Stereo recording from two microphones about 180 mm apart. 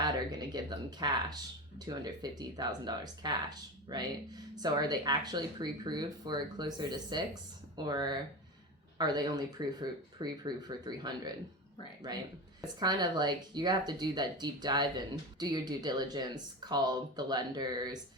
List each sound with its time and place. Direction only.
0.0 s speech: 20° right (ahead or behind)
12.8 s speech: 25° right (ahead or behind)